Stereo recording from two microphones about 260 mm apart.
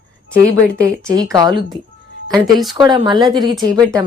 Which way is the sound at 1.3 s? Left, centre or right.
Centre.